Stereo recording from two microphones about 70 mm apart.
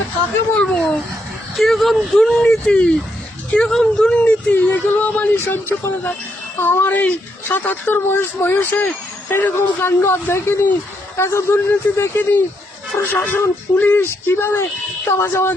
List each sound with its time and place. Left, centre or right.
0.5 s a sound: centre
1.5 s speech: centre
4.5 s speech: left
6.6 s speech: left
11.2 s speech: left